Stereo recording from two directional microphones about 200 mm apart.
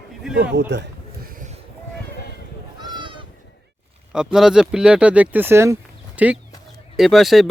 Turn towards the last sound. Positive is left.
turn(degrees=0)  # may be behind; listen again after turning